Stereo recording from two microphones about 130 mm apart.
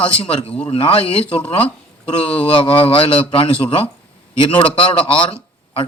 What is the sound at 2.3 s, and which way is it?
A man's voice, 45° left (ahead or behind).